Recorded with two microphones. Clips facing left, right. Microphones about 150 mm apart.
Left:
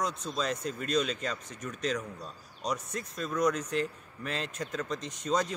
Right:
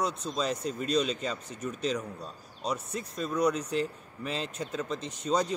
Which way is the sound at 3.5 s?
30° right (ahead or behind).